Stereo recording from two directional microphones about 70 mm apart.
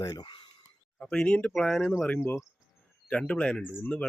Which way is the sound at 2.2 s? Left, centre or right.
Left.